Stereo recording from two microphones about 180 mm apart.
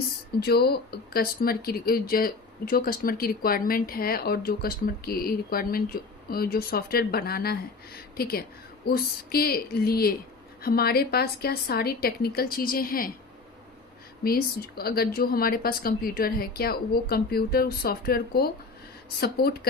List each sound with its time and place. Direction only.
0.3 s speech: 60° left (ahead or behind)
14.3 s speech: 55° left (ahead or behind)